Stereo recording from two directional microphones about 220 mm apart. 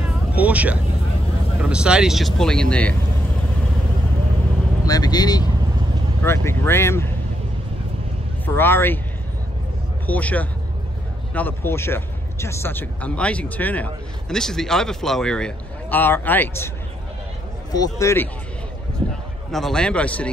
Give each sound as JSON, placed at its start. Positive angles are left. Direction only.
{"t": 0.4, "sound": "a man's voice", "side_deg": -5}
{"t": 4.8, "sound": "a man's voice", "side_deg": 15}
{"t": 8.5, "sound": "a man's voice", "side_deg": 10}
{"t": 10.0, "sound": "a man's voice", "side_deg": 5}
{"t": 17.7, "sound": "a man's voice", "side_deg": 15}
{"t": 19.0, "sound": "a sound", "side_deg": -25}
{"t": 19.5, "sound": "a man's voice", "side_deg": 0}